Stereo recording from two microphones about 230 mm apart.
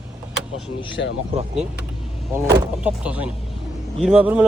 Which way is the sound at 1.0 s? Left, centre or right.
Left.